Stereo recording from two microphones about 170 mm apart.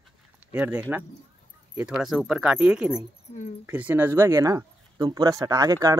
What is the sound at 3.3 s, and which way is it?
Speech, 35° left (ahead or behind).